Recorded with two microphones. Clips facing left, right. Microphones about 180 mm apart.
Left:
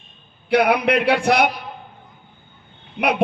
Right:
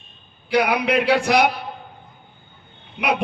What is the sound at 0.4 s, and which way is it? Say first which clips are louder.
Speech: left 3 dB; 60° left (ahead or behind).